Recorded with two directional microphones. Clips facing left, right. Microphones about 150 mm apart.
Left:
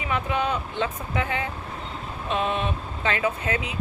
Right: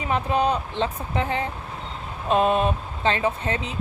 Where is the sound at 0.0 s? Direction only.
35° right (ahead or behind).